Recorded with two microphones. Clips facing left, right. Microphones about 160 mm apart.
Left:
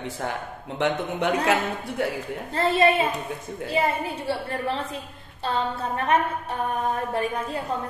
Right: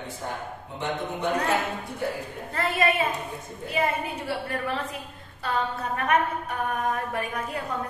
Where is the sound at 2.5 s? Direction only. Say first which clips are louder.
Left 5 dB; 25° left (ahead or behind).